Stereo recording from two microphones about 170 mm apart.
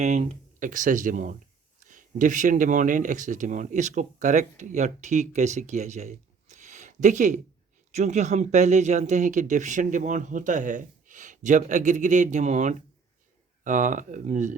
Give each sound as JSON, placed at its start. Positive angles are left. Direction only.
{"t": 0.0, "sound": "speech", "side_deg": -45}